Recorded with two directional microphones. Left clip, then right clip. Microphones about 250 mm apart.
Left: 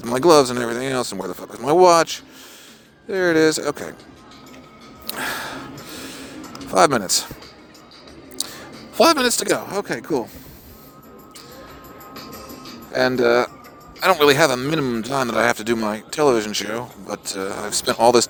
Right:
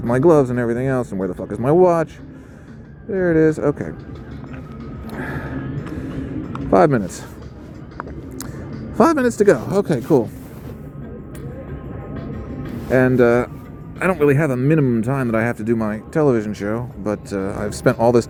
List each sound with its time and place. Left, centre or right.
0.0 s speech: left
3.1 s speech: left
5.1 s music: left
6.7 s speech: left
9.0 s a man's voice: left
13.0 s speech: left